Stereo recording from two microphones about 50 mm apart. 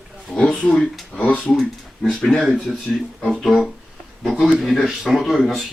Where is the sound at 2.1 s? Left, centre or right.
Centre.